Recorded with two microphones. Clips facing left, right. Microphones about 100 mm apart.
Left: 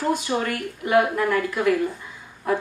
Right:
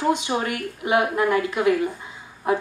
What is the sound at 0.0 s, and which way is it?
Speech, 20° right (ahead or behind).